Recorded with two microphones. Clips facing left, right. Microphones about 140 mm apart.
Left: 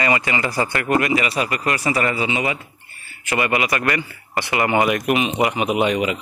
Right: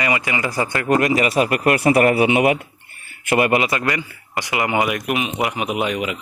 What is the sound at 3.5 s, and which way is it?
Speech, 25° right (ahead or behind).